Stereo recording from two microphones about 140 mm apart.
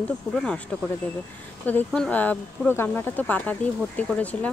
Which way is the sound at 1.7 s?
10° left (ahead or behind).